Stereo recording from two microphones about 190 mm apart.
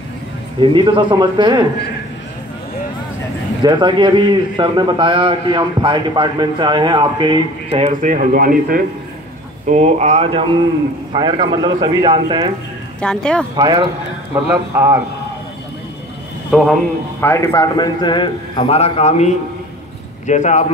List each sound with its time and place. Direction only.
0.6 s a man's voice: 25° right (ahead or behind)
3.6 s a man's voice: 25° right (ahead or behind)
8.0 s a man's voice: 45° right (ahead or behind)
9.7 s a man's voice: 40° right (ahead or behind)
13.0 s speech: 5° left (ahead or behind)
13.6 s a man's voice: 25° right (ahead or behind)
14.7 s a man's voice: 15° right (ahead or behind)
16.4 s a man's voice: centre (ahead or behind)
17.2 s a man's voice: 15° left (ahead or behind); by 20.6 s 40° left (ahead or behind)